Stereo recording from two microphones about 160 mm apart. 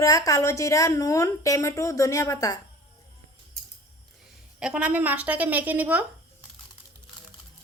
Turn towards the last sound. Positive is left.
turn(degrees=-10)  # may be behind; listen again after turning